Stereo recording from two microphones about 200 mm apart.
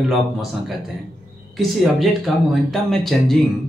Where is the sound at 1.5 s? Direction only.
Centre (ahead or behind).